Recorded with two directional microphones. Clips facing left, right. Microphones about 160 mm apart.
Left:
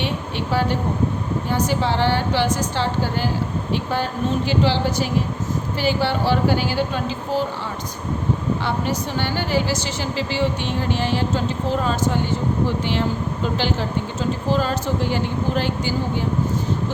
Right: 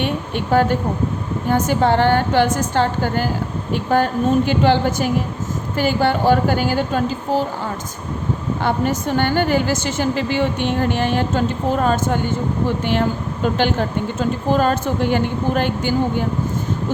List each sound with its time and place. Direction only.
0.0 s a sound: 50° right (ahead or behind)
1.5 s a woman's voice: 50° right (ahead or behind)
8.6 s a woman's voice: 50° right (ahead or behind)